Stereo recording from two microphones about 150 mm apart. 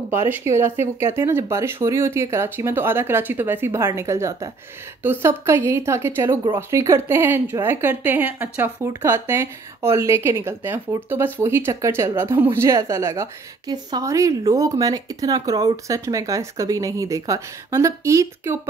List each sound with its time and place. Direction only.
0.1 s a woman's voice: 15° right (ahead or behind)